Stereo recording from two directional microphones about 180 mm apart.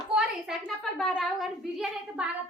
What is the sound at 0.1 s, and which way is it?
A woman's voice, centre (ahead or behind).